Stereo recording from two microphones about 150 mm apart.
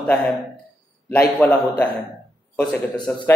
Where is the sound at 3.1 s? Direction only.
10° left (ahead or behind).